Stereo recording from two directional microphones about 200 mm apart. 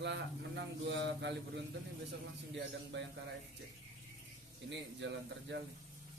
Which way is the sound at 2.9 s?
60° right (ahead or behind).